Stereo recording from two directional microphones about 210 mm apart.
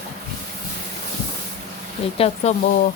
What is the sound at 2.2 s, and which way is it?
Speech, 30° left (ahead or behind).